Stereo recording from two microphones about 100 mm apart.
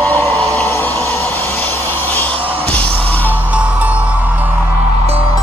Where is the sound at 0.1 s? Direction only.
15° left (ahead or behind).